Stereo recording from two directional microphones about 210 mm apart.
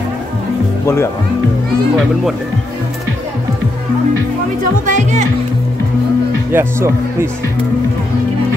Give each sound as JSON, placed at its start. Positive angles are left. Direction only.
{"t": 4.8, "sound": "speech", "side_deg": -35}
{"t": 6.5, "sound": "speech", "side_deg": -10}